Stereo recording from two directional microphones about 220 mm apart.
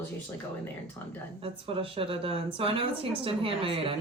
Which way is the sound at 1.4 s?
25° right (ahead or behind).